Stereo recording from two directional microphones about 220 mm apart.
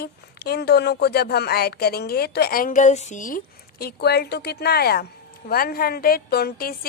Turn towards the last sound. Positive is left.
turn(degrees=40)  # may be behind; listen again after turning